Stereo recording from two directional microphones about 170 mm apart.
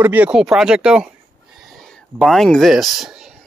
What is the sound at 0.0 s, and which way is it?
Speech, 10° right (ahead or behind).